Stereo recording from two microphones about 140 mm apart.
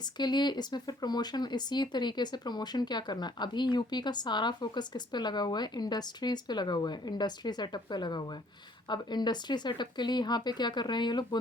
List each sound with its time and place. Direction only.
0.2 s speech: 30° left (ahead or behind)